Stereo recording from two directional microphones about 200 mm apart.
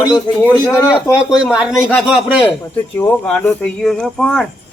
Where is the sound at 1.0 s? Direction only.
5° right (ahead or behind).